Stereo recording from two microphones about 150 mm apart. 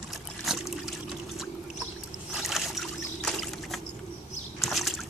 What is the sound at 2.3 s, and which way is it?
Boat, centre (ahead or behind).